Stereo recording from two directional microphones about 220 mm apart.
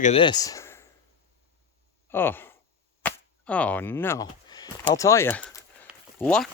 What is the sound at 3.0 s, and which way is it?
Whip, 5° left (ahead or behind).